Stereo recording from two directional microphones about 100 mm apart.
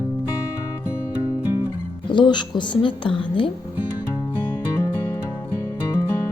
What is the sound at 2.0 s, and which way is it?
Speech, 50° left (ahead or behind).